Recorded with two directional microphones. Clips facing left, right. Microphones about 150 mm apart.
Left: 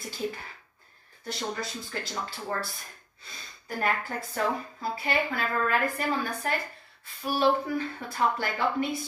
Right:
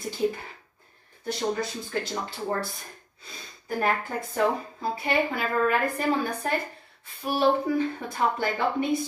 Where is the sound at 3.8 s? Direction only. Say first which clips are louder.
Right 2 dB; 20° right (ahead or behind).